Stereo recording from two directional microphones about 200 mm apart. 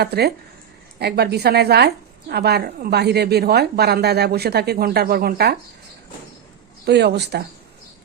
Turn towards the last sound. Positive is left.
turn(degrees=-55)  # may be behind; listen again after turning